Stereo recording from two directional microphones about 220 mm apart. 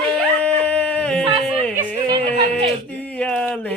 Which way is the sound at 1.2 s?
25° right (ahead or behind).